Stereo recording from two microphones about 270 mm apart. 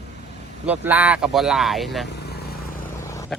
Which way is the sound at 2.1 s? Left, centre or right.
Left.